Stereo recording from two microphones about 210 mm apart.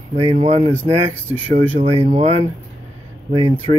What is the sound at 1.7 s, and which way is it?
Speech, 30° right (ahead or behind).